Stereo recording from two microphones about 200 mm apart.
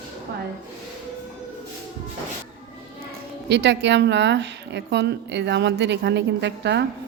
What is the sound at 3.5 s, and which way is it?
A woman's voice, 60° right (ahead or behind).